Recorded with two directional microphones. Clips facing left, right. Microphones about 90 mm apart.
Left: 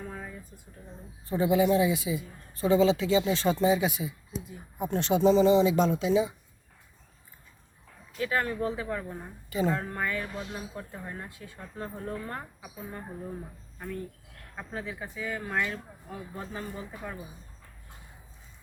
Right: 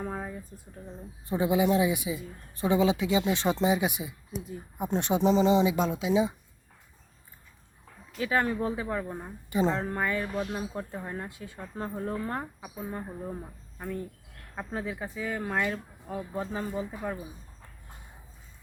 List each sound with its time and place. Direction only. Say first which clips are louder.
0.0 s a sound: right 5 dB; 35° right (ahead or behind)
1.3 s speech: left 1 dB; 15° right (ahead or behind)
5.7 s speech: left 2 dB; 5° right (ahead or behind)
8.2 s speech: right 2 dB; 20° right (ahead or behind)